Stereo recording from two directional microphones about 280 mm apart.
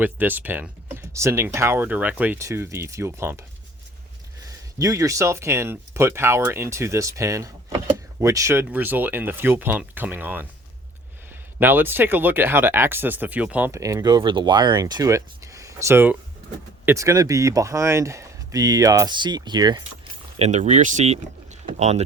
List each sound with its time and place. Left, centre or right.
0.0 s speech: centre
4.4 s speech: centre
11.6 s speech: centre; by 22.0 s right